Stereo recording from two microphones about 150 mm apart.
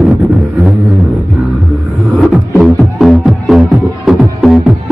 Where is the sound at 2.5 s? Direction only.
Centre (ahead or behind).